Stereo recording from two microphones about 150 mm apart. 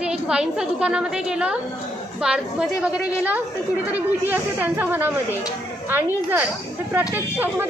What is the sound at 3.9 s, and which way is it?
A woman's voice, 15° right (ahead or behind).